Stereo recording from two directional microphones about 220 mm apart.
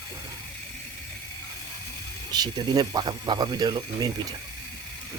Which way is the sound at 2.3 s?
20° right (ahead or behind).